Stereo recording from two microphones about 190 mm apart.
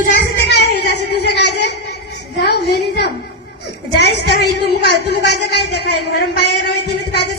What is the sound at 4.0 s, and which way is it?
Speech, 60° left (ahead or behind).